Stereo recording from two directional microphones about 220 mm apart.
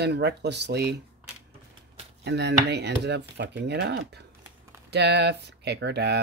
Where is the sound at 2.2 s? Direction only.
50° right (ahead or behind).